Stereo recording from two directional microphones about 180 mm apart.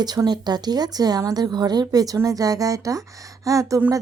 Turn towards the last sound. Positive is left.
turn(degrees=-15)  # may be behind; listen again after turning